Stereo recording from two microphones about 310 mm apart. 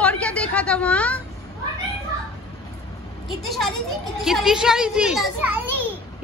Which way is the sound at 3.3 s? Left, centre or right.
Centre.